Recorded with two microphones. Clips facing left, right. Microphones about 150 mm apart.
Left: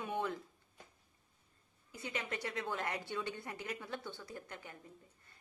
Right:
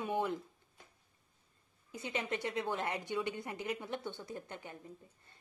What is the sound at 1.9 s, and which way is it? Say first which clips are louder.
A woman's voice: right 4 dB; 25° right (ahead or behind).